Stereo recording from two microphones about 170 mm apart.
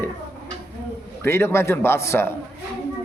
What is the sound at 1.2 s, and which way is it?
A man's voice, 15° left (ahead or behind).